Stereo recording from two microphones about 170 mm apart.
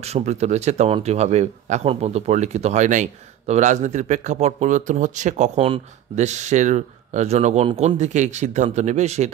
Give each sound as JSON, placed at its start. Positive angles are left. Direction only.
{"t": 0.0, "sound": "speech", "side_deg": -40}